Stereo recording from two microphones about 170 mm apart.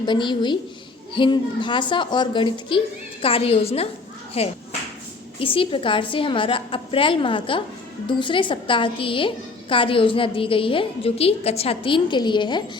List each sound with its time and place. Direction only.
0.0 s a woman's voice: 25° left (ahead or behind)